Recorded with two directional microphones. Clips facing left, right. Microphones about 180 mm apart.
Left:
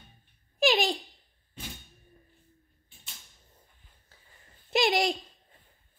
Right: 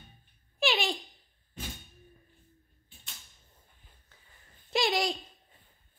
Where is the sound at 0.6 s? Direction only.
40° left (ahead or behind).